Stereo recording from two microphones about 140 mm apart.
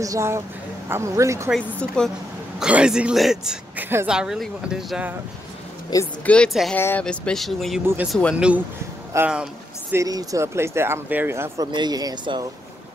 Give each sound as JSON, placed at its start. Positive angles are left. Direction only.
{"t": 0.0, "sound": "speech", "side_deg": -20}
{"t": 2.6, "sound": "a man's voice", "side_deg": -5}
{"t": 5.9, "sound": "speech", "side_deg": 25}
{"t": 6.2, "sound": "speech", "side_deg": 10}
{"t": 7.8, "sound": "speech", "side_deg": -15}
{"t": 8.1, "sound": "speech", "side_deg": 5}
{"t": 8.4, "sound": "speech", "side_deg": -10}
{"t": 9.3, "sound": "a sound", "side_deg": -5}
{"t": 9.9, "sound": "speech", "side_deg": -25}
{"t": 11.6, "sound": "speech", "side_deg": -30}